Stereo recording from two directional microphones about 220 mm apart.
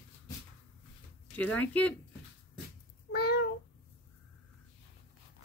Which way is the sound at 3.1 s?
45° left (ahead or behind).